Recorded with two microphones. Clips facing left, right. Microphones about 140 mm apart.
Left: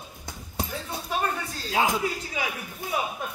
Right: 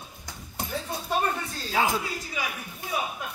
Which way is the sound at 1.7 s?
20° left (ahead or behind).